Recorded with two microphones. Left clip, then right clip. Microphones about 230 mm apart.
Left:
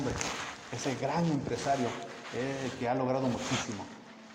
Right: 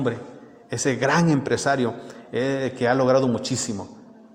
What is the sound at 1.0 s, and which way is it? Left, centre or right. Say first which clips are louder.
Speech: right 12 dB; right.